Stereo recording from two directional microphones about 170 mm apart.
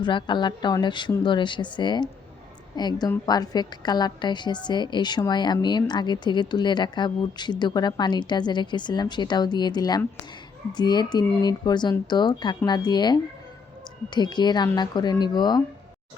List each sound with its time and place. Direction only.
0.0 s a woman's voice: 25° left (ahead or behind)